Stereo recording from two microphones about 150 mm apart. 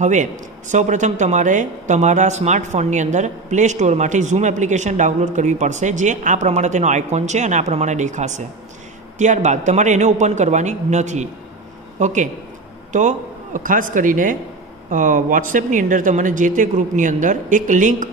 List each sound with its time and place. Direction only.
0.0 s speech: 55° right (ahead or behind)